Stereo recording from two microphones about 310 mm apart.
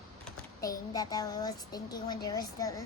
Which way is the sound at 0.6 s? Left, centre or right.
Centre.